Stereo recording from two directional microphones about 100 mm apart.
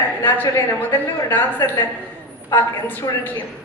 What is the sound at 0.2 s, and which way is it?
A woman's voice, 20° left (ahead or behind).